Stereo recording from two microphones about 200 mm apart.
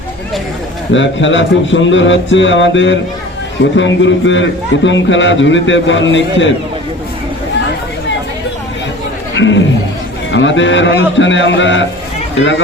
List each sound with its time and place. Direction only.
0.9 s a man's voice: 65° left (ahead or behind)
9.3 s a man's voice: 70° left (ahead or behind)